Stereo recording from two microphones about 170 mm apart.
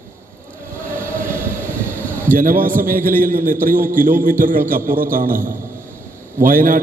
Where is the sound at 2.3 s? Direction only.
55° right (ahead or behind).